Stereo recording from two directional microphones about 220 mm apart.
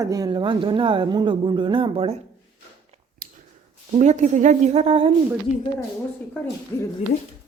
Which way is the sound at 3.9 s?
35° right (ahead or behind).